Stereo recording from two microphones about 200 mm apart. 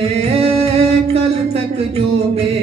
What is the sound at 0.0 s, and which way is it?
Singing, 30° right (ahead or behind).